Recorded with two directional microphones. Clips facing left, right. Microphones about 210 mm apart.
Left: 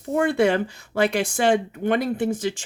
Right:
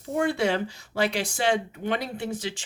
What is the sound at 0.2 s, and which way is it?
Speech, 55° left (ahead or behind).